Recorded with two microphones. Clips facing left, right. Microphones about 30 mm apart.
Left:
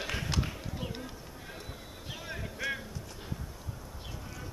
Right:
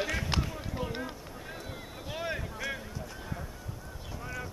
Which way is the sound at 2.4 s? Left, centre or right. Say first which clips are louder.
Left 1 dB; centre.